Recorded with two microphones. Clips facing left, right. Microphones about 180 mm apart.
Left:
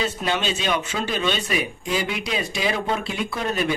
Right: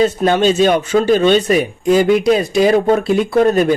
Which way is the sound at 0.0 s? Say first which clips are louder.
Right 12 dB; 45° right (ahead or behind).